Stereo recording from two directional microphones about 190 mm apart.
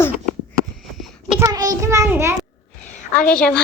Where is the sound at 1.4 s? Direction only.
20° right (ahead or behind).